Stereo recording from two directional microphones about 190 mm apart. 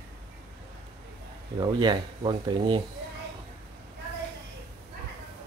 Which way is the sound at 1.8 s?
25° right (ahead or behind).